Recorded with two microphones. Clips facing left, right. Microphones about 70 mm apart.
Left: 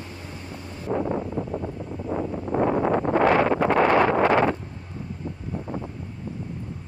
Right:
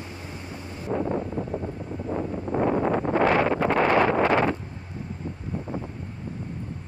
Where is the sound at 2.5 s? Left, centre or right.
Left.